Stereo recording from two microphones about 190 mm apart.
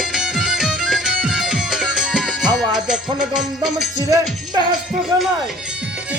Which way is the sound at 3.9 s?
20° right (ahead or behind).